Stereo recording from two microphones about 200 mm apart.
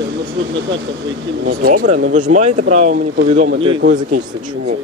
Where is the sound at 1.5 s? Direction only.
45° right (ahead or behind).